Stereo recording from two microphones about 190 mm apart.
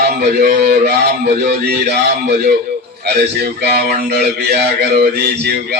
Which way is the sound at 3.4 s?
60° right (ahead or behind).